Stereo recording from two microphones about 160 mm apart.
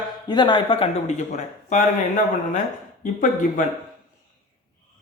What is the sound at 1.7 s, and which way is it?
Speech, 50° left (ahead or behind).